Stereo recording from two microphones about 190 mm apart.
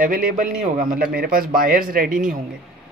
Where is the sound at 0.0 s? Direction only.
50° right (ahead or behind).